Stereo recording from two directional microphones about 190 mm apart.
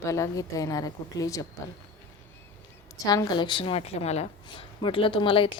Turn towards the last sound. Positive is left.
turn(degrees=25)  # may be behind; listen again after turning